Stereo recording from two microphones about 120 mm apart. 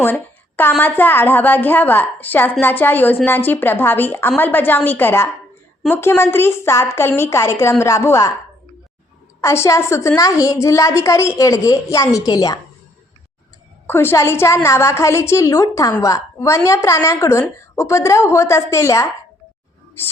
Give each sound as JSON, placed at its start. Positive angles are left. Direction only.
{"t": 0.0, "sound": "a sound", "side_deg": 15}
{"t": 0.8, "sound": "a woman's voice", "side_deg": 15}
{"t": 9.4, "sound": "a woman's voice", "side_deg": 25}
{"t": 13.8, "sound": "a woman's voice", "side_deg": 20}